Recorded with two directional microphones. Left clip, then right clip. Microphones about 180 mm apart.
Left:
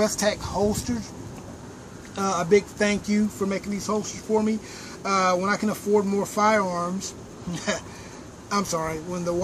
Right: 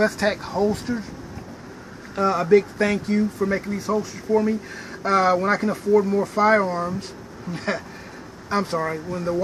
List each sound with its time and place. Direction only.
0.0 s speech: centre (ahead or behind)
2.1 s speech: 5° left (ahead or behind)